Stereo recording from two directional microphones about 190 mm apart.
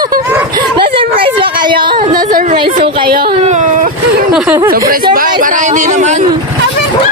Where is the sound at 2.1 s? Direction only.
45° right (ahead or behind).